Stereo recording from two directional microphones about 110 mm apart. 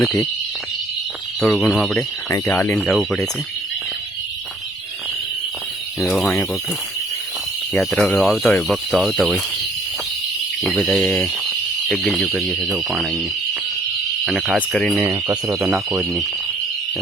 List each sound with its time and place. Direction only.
1.4 s speech: 5° left (ahead or behind)
2.3 s speech: 20° left (ahead or behind)
2.7 s speech: centre (ahead or behind)
6.0 s speech: centre (ahead or behind)
7.7 s speech: 5° left (ahead or behind)
10.6 s speech: centre (ahead or behind)
14.3 s speech: centre (ahead or behind)
15.3 s speech: 30° right (ahead or behind)
15.6 s speech: 15° right (ahead or behind)